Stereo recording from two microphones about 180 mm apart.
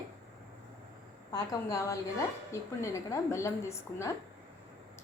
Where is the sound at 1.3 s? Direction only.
20° left (ahead or behind).